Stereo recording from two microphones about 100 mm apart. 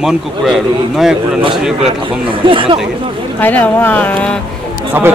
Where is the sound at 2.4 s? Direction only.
60° right (ahead or behind).